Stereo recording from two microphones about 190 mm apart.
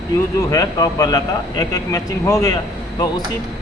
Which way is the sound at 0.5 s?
20° left (ahead or behind).